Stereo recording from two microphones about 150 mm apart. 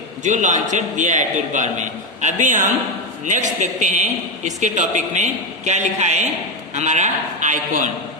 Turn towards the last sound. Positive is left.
turn(degrees=-55)  # may be behind; listen again after turning